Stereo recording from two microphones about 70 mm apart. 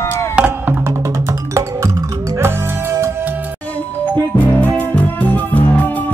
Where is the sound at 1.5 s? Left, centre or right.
Right.